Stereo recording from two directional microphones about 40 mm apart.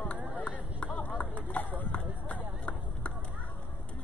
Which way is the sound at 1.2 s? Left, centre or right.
Left.